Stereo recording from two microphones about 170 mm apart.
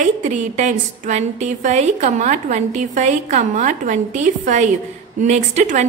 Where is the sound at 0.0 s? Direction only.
45° right (ahead or behind).